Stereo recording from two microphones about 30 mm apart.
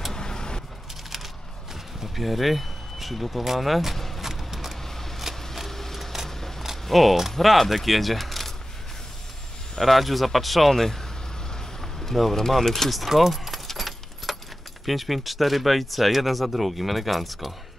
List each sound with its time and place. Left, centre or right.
0.1 s vehicle: left
2.0 s speech: centre
4.5 s vehicle: centre
5.3 s vehicle: centre
5.7 s a sound: centre
6.9 s speech: centre
9.8 s speech: centre
12.9 s speech: centre
13.5 s keys jangling: centre
14.9 s speech: centre